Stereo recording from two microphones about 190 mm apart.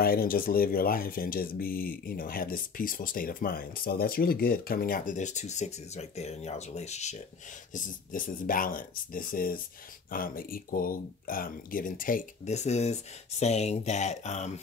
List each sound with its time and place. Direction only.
0.0 s speech: 50° left (ahead or behind)